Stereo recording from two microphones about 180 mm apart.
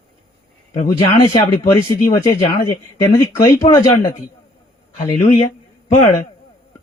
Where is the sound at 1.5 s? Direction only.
15° left (ahead or behind).